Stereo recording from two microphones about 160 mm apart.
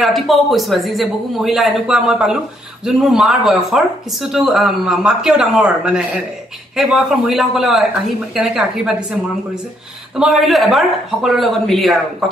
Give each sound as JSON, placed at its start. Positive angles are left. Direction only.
{"t": 0.0, "sound": "speech", "side_deg": 0}
{"t": 10.1, "sound": "speech", "side_deg": 0}